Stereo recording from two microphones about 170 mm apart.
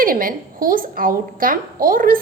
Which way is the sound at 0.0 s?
55° right (ahead or behind).